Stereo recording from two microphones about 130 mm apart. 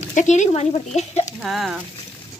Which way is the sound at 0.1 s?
65° left (ahead or behind).